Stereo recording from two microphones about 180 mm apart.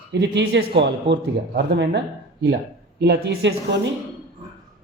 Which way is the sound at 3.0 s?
70° right (ahead or behind).